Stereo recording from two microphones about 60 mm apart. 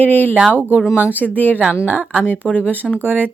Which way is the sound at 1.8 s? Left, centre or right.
Right.